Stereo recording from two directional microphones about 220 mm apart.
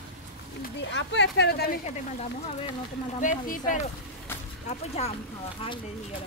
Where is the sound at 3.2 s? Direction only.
35° left (ahead or behind).